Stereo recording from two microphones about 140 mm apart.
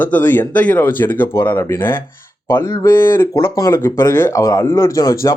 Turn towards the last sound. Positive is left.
turn(degrees=25)  # may be behind; listen again after turning